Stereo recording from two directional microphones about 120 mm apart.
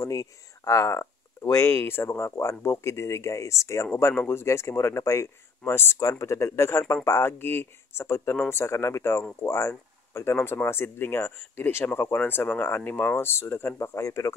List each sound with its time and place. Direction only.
0.0 s speech: 25° left (ahead or behind)